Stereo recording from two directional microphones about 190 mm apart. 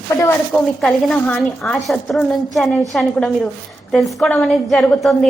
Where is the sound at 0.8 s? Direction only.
Centre (ahead or behind).